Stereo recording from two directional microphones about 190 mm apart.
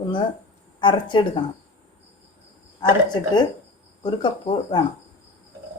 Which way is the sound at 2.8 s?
20° left (ahead or behind).